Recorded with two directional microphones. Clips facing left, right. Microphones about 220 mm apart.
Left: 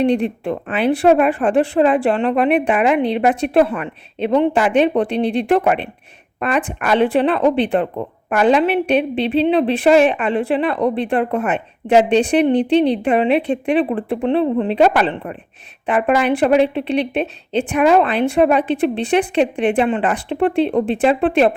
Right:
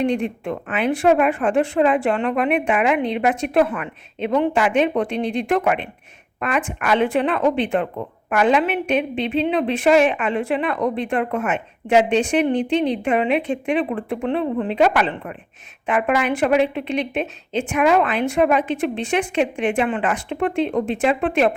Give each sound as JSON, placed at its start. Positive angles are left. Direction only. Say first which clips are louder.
{"t": 0.0, "sound": "speech", "louder": "left 4 dB", "side_deg": 35}